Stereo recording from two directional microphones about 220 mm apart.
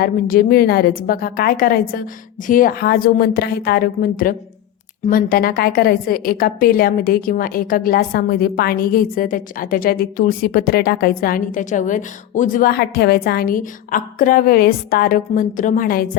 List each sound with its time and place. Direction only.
0.0 s a woman's voice: 40° left (ahead or behind)